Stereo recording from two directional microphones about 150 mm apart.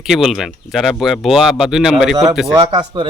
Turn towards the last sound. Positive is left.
turn(degrees=-30)  # may be behind; listen again after turning